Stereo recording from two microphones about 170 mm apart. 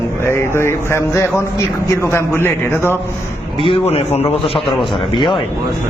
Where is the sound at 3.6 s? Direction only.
35° left (ahead or behind).